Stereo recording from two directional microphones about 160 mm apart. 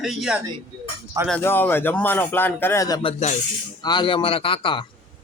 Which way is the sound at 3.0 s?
40° left (ahead or behind).